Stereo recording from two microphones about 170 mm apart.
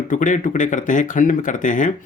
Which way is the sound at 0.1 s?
50° left (ahead or behind).